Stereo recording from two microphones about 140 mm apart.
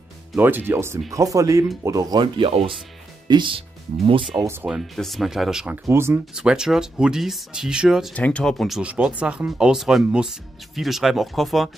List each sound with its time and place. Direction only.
0.4 s speech: 15° right (ahead or behind); by 4.4 s 40° right (ahead or behind)
4.4 s speech: 15° right (ahead or behind)
4.6 s speech: centre (ahead or behind)
5.9 s speech: 20° right (ahead or behind)
6.3 s speech: 5° right (ahead or behind)
8.1 s speech: 10° left (ahead or behind)